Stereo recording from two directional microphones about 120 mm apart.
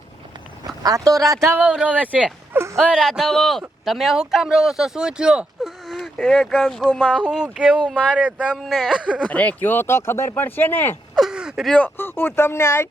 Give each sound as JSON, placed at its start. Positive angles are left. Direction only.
{"t": 0.8, "sound": "speech", "side_deg": -30}
{"t": 1.5, "sound": "speech", "side_deg": -5}
{"t": 2.7, "sound": "a man's voice", "side_deg": 0}
{"t": 7.2, "sound": "a man's voice", "side_deg": -5}
{"t": 9.2, "sound": "speech", "side_deg": 10}
{"t": 11.1, "sound": "a sound", "side_deg": -5}
{"t": 11.7, "sound": "speech", "side_deg": 15}